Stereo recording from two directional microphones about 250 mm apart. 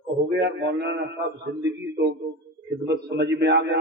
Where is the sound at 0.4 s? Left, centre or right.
Right.